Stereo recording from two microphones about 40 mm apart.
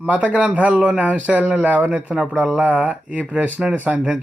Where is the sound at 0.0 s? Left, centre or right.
Right.